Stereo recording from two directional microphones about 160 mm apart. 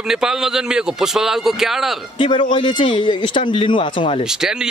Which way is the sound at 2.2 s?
30° left (ahead or behind).